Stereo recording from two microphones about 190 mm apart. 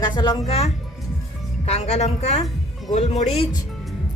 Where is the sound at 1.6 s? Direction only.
35° left (ahead or behind).